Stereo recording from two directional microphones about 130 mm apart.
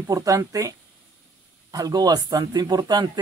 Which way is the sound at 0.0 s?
25° right (ahead or behind).